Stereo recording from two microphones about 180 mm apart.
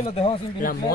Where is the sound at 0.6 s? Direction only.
50° left (ahead or behind).